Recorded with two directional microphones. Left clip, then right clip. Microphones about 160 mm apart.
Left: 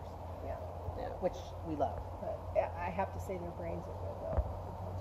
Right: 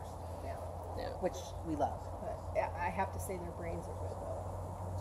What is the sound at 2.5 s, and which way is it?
Speech, 55° left (ahead or behind).